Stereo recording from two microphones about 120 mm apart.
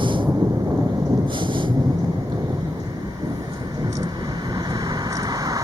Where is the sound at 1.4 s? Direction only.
40° right (ahead or behind).